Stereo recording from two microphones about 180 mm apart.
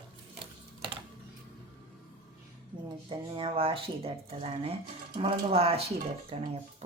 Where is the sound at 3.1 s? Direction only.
30° right (ahead or behind).